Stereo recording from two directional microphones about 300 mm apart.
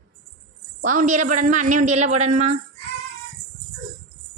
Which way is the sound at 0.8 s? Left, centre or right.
Right.